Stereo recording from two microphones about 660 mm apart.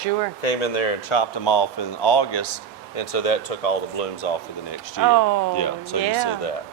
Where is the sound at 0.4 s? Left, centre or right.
Left.